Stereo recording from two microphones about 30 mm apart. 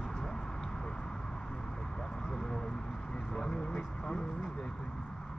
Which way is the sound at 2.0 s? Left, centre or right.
Left.